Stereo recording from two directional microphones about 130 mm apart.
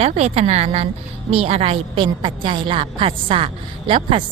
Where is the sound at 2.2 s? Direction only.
40° right (ahead or behind).